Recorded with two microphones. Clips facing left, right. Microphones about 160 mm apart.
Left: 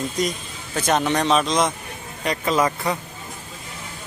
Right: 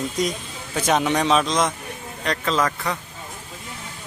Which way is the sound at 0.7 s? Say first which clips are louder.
Even; 5° right (ahead or behind).